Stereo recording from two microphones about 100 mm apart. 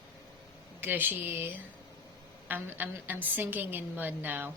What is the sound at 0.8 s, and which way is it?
A woman's voice, 20° right (ahead or behind).